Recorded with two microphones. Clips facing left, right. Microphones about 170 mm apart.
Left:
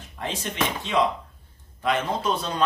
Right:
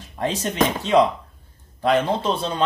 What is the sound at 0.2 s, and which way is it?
Speech, 40° right (ahead or behind).